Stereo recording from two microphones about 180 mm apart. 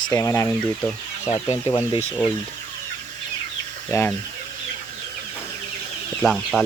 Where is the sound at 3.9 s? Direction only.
10° left (ahead or behind).